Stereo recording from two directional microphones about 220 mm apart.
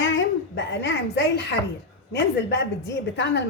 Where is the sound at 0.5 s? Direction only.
55° left (ahead or behind).